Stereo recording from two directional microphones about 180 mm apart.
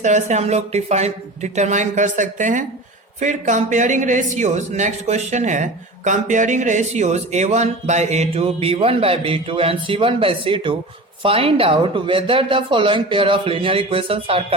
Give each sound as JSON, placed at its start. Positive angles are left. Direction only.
{"t": 0.0, "sound": "a man's voice", "side_deg": -40}